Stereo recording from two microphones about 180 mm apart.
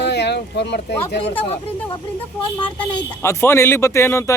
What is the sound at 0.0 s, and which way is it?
Speech, 70° left (ahead or behind).